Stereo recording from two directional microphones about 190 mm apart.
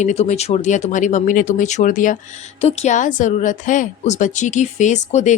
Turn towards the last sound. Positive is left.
turn(degrees=40)  # may be behind; listen again after turning